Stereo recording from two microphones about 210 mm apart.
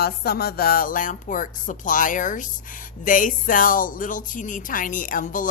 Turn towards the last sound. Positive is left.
turn(degrees=40)  # may be behind; listen again after turning